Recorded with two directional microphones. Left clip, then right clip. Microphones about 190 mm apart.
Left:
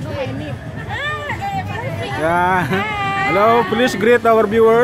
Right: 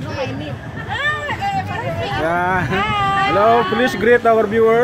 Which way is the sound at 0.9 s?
5° right (ahead or behind).